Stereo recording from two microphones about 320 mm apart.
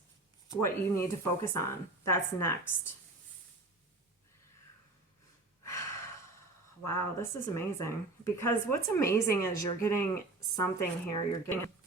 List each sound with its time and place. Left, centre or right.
0.4 s speech: centre
5.6 s gasp: centre
6.8 s speech: centre